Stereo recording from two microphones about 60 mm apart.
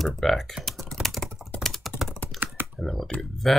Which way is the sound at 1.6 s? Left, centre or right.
Centre.